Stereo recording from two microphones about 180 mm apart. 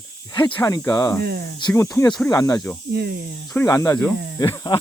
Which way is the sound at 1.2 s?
60° right (ahead or behind).